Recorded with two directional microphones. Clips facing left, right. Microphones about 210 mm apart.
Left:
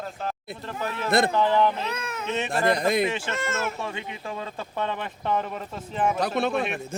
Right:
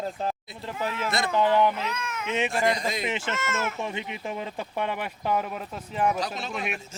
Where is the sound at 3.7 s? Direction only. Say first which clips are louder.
Right 1 dB; 20° right (ahead or behind); by 6.1 s centre (ahead or behind).